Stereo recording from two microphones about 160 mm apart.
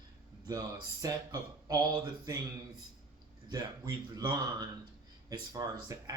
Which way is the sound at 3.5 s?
25° right (ahead or behind).